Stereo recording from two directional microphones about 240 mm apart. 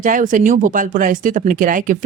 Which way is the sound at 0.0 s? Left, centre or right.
Right.